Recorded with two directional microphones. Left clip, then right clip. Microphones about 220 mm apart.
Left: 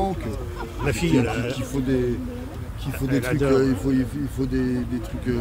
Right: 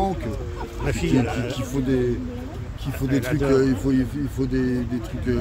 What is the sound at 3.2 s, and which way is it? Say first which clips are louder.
Speech: left 1 dB; 50° left (ahead or behind).